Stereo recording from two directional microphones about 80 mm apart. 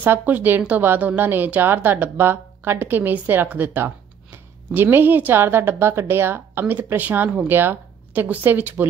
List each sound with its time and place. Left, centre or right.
0.0 s a woman's voice: right